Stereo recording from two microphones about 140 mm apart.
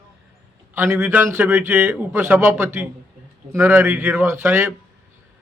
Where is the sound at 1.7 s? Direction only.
5° right (ahead or behind).